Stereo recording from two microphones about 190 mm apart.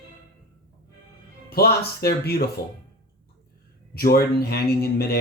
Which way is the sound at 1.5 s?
55° left (ahead or behind).